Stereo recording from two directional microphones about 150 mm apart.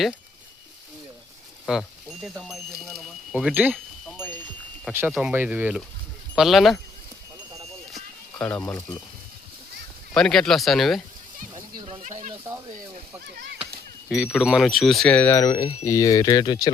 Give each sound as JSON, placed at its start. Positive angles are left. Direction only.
{"t": 1.7, "sound": "speech", "side_deg": -5}
{"t": 4.9, "sound": "speech", "side_deg": -15}
{"t": 7.9, "sound": "a sound", "side_deg": 10}
{"t": 10.2, "sound": "speech", "side_deg": 5}
{"t": 12.0, "sound": "speech", "side_deg": -55}
{"t": 14.3, "sound": "speech", "side_deg": -5}